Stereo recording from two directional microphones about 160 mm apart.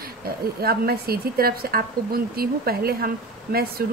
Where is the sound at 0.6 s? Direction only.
75° right (ahead or behind).